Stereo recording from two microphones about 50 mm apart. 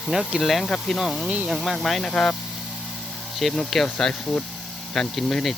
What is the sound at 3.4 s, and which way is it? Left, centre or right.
Speech, centre.